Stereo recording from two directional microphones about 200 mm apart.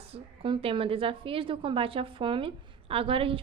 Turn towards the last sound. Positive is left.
turn(degrees=-25)  # may be behind; listen again after turning